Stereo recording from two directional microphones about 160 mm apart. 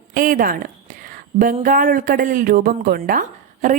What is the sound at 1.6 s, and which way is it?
A woman's voice, 60° right (ahead or behind).